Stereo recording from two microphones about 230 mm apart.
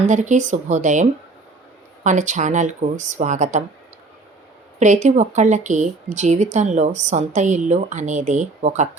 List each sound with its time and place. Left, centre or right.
0.1 s a woman's voice: right
2.0 s a woman's voice: right
4.8 s a woman's voice: right